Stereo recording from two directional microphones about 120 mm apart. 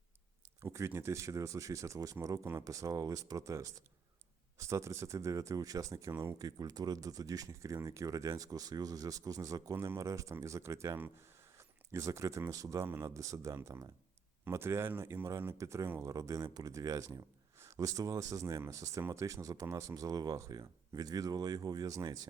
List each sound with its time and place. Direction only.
0.6 s speech: 20° right (ahead or behind)